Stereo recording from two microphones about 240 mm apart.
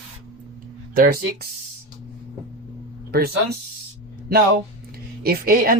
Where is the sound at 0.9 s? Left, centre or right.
Right.